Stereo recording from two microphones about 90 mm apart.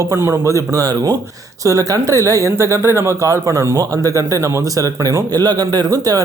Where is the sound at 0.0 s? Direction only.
30° right (ahead or behind).